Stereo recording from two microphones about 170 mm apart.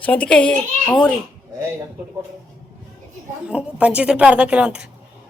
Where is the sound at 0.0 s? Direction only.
10° left (ahead or behind).